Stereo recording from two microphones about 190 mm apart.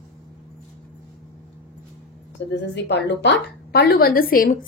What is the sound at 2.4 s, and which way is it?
A woman's voice, 65° left (ahead or behind).